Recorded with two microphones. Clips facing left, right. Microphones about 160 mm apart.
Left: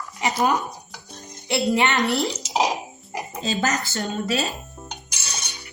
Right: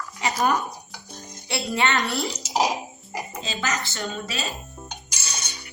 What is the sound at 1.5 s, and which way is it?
Speech, 20° left (ahead or behind).